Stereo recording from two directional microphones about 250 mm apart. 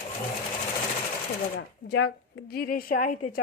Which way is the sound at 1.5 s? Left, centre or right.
Left.